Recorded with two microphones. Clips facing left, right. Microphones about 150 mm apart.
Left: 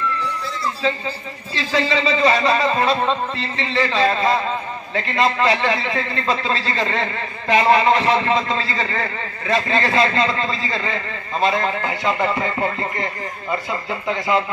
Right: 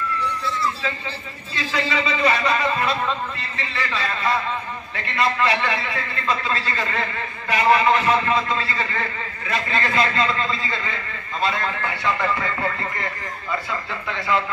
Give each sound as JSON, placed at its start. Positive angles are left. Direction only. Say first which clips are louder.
{"t": 0.8, "sound": "a man's voice", "louder": "left 6 dB", "side_deg": 30}